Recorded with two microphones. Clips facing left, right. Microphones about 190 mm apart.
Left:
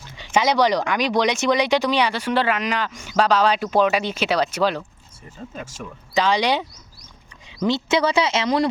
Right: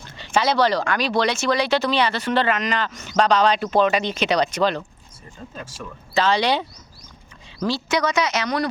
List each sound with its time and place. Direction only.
0.2 s speech: 15° left (ahead or behind)
6.1 s speech: 15° left (ahead or behind)
7.6 s speech: 25° left (ahead or behind)